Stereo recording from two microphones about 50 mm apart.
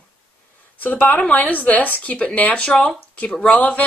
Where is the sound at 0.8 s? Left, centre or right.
Left.